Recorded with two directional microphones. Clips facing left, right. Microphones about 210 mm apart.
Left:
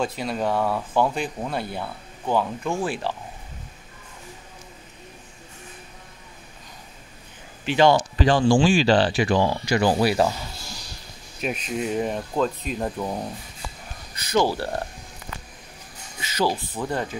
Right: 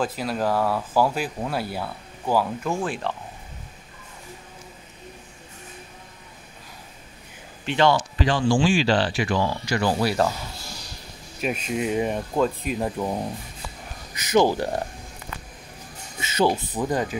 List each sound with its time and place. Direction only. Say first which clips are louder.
0.0 s speech: even; centre (ahead or behind)
7.6 s speech: left 2 dB; 5° left (ahead or behind)
8.2 s speech: left 4 dB; 40° left (ahead or behind); by 10.0 s 20° left (ahead or behind)
10.0 s speech: left 2 dB; 10° left (ahead or behind)
11.4 s speech: right 1 dB; 5° right (ahead or behind)
14.1 s speech: right 3 dB; 15° right (ahead or behind)
16.2 s speech: right 3 dB; 25° right (ahead or behind)